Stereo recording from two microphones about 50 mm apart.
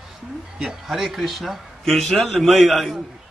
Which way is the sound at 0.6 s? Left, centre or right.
Centre.